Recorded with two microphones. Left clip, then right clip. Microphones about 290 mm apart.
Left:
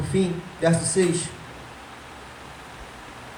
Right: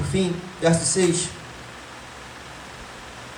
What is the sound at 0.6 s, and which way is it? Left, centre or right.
Speech, centre.